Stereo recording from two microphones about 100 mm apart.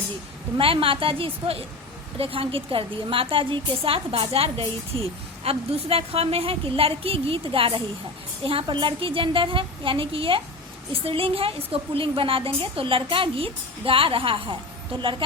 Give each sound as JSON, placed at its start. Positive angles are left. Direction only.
{"t": 0.6, "sound": "a woman's voice", "side_deg": -65}